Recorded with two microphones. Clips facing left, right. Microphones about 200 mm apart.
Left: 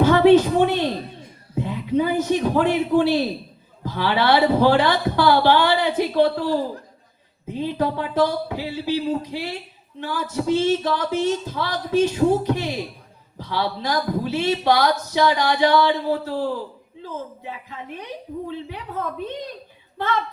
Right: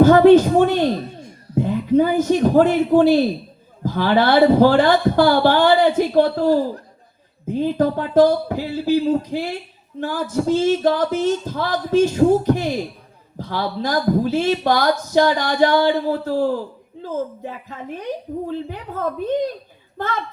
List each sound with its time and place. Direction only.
0.0 s a man's voice: 45° right (ahead or behind)